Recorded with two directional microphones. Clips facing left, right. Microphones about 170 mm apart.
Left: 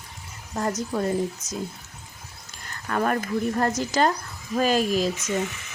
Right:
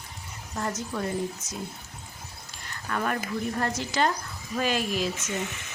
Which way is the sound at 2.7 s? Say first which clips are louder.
Left 5 dB; 40° left (ahead or behind).